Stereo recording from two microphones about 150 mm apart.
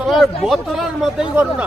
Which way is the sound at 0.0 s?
Centre (ahead or behind).